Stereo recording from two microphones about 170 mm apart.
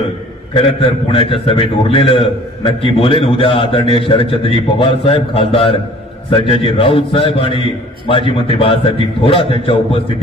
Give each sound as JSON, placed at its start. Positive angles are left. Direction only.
{"t": 0.6, "sound": "a man's voice", "side_deg": 35}